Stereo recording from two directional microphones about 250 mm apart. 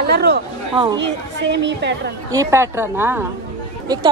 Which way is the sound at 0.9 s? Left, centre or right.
Right.